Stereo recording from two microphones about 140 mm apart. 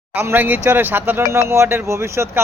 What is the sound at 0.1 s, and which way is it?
Speech, 15° right (ahead or behind).